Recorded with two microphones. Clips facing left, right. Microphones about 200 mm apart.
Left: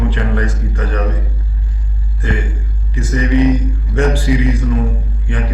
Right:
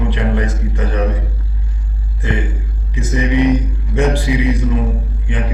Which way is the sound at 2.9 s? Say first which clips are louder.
Left 1 dB; 20° right (ahead or behind).